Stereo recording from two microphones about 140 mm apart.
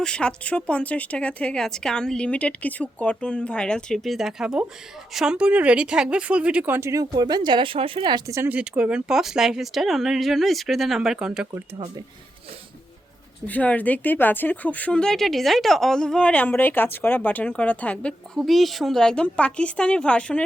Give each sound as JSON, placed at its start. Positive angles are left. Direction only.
{"t": 0.0, "sound": "speech", "side_deg": 5}
{"t": 8.3, "sound": "speech", "side_deg": -20}
{"t": 8.5, "sound": "speech", "side_deg": -5}
{"t": 13.5, "sound": "speech", "side_deg": 10}